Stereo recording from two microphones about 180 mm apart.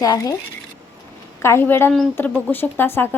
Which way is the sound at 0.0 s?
20° left (ahead or behind).